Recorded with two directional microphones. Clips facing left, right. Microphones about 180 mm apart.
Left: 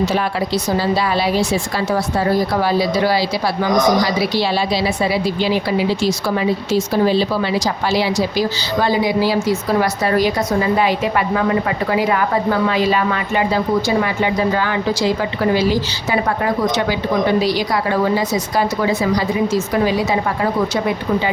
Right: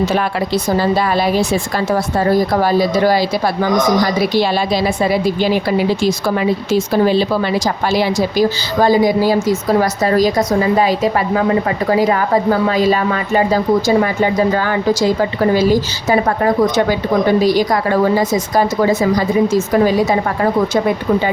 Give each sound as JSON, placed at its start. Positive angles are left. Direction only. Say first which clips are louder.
{"t": 0.8, "sound": "a woman's voice", "louder": "right 3 dB", "side_deg": -50}
{"t": 7.9, "sound": "a woman's voice", "louder": "right 2 dB", "side_deg": -50}
{"t": 17.4, "sound": "a woman's voice", "louder": "right 4 dB", "side_deg": -45}